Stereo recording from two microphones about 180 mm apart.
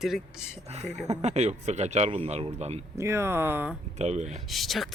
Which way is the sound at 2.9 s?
15° right (ahead or behind).